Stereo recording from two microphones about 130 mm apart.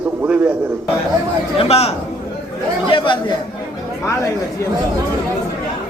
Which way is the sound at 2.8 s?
40° left (ahead or behind).